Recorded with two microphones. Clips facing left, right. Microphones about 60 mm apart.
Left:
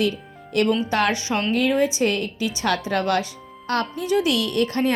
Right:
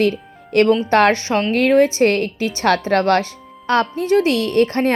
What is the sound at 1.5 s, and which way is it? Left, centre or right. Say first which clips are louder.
Speech: right 7 dB; right.